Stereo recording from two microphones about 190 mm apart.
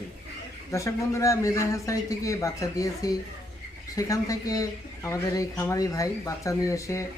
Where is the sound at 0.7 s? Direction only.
15° left (ahead or behind).